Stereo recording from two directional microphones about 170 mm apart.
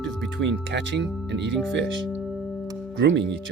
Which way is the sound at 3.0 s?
90° right.